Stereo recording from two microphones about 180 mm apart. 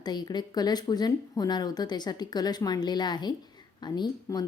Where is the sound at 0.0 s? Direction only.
25° left (ahead or behind).